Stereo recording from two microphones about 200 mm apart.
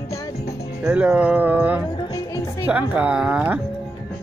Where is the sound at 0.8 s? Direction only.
5° right (ahead or behind).